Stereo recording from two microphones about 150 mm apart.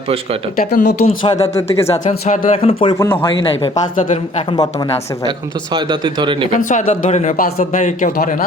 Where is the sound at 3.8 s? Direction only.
60° left (ahead or behind).